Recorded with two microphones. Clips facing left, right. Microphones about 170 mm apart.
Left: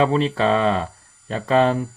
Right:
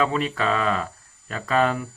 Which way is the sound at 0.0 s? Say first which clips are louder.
Left 5 dB; 30° left (ahead or behind).